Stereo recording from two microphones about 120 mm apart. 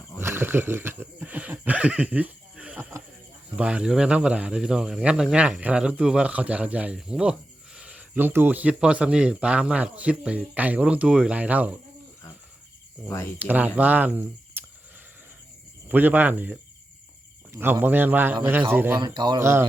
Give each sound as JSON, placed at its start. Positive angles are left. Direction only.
{"t": 0.2, "sound": "speech", "side_deg": -20}
{"t": 13.4, "sound": "speech", "side_deg": -15}
{"t": 14.6, "sound": "a sound", "side_deg": -15}
{"t": 15.9, "sound": "speech", "side_deg": -15}
{"t": 18.9, "sound": "speech", "side_deg": -40}
{"t": 19.4, "sound": "speech", "side_deg": -20}